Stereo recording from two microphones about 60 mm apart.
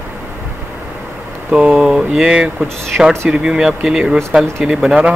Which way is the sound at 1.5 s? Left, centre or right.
Centre.